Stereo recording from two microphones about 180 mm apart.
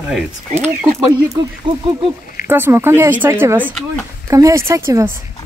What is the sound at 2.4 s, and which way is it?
Speech, 10° right (ahead or behind).